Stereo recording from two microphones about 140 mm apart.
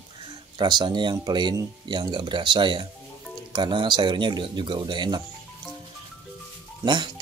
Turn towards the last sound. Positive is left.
turn(degrees=-30)  # may be behind; listen again after turning